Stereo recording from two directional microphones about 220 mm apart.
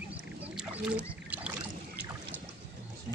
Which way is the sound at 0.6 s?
5° right (ahead or behind).